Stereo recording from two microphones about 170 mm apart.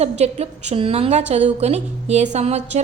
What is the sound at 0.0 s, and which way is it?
A woman's voice, 40° right (ahead or behind).